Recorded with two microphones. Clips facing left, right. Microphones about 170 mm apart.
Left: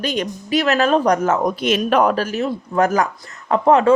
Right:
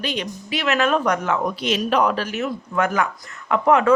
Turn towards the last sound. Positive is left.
turn(degrees=30)  # may be behind; listen again after turning